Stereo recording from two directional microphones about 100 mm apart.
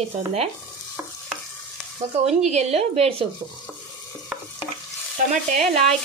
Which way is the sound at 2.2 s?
90° right.